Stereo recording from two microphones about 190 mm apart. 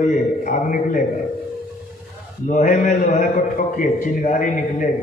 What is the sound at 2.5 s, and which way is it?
A man's voice, 40° left (ahead or behind).